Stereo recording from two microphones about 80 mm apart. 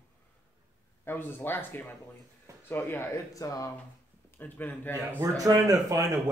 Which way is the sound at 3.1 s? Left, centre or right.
Left.